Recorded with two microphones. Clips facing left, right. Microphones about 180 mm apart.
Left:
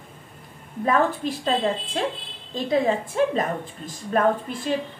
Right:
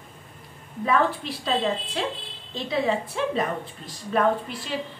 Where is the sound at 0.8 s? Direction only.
45° left (ahead or behind).